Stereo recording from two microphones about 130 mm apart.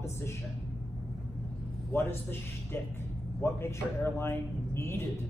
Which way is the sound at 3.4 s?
20° left (ahead or behind).